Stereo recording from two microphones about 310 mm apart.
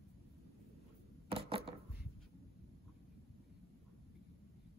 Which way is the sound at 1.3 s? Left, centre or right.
Centre.